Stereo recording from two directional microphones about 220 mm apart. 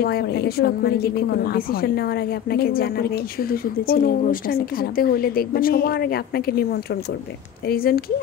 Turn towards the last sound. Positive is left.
turn(degrees=40)  # may be behind; listen again after turning